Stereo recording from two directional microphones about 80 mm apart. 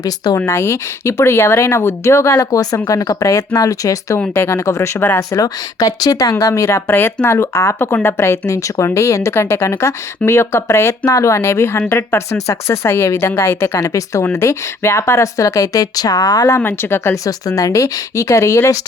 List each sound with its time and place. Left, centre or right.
0.4 s speech: left
5.3 s speech: left
6.4 s speech: left
13.7 s speech: left
16.6 s speech: left
17.2 s speech: left